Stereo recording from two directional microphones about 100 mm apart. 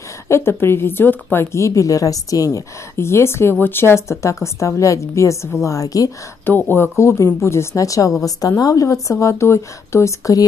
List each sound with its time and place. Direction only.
0.3 s a woman's voice: 25° left (ahead or behind)
6.4 s a woman's voice: 20° left (ahead or behind)